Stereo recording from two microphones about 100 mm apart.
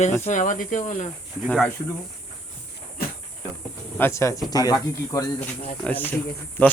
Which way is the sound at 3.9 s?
25° left (ahead or behind).